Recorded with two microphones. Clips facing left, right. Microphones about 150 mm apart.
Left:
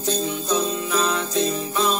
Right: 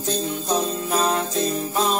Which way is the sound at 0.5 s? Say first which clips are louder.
Right 1 dB; 45° right (ahead or behind).